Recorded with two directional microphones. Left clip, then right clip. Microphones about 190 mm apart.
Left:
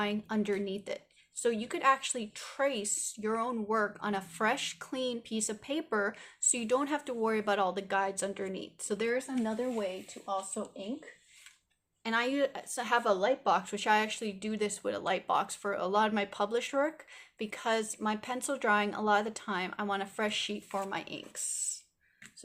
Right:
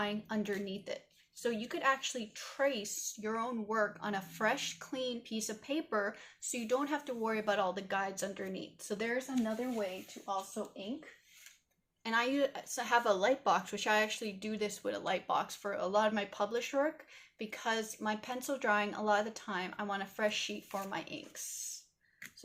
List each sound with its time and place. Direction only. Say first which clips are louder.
0.0 s a woman's voice: left 4 dB; 40° left (ahead or behind)
12.0 s a woman's voice: left 2 dB; 30° left (ahead or behind)